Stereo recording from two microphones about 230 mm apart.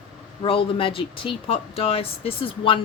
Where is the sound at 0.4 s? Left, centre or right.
Left.